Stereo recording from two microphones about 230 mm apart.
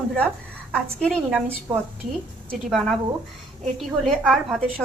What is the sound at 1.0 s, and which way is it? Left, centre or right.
Speech, centre.